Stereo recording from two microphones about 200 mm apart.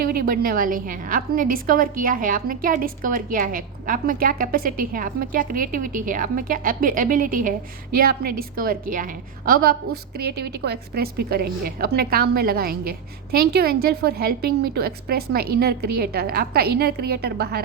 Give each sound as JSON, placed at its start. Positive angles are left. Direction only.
{"t": 0.0, "sound": "a woman's voice", "side_deg": -50}